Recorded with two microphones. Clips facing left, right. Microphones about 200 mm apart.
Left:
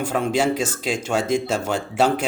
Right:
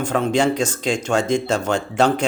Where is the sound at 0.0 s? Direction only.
5° left (ahead or behind).